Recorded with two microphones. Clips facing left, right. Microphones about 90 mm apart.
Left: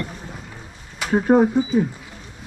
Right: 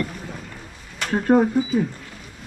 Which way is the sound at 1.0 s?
5° left (ahead or behind).